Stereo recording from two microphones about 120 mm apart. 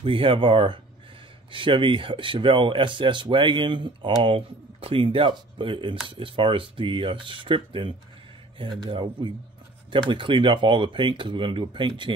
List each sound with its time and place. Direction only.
0.0 s speech: 45° right (ahead or behind)